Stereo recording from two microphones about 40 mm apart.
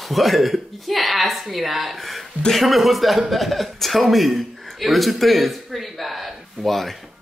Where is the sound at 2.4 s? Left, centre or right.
Centre.